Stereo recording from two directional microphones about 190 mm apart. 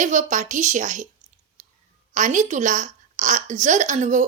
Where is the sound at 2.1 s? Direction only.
40° right (ahead or behind).